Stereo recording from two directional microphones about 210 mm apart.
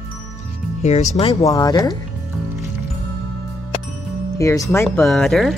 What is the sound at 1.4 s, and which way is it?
Speech, 15° left (ahead or behind).